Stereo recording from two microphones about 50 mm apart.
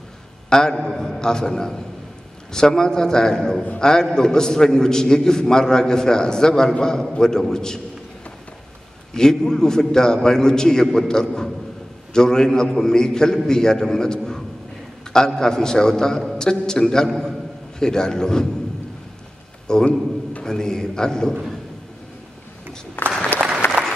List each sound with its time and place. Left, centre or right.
0.5 s a man's voice: centre
9.1 s a man's voice: centre
19.7 s a man's voice: centre
23.6 s applause: left